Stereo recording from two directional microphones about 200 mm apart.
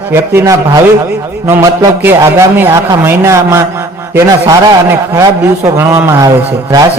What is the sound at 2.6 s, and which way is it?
A man's voice, 15° right (ahead or behind).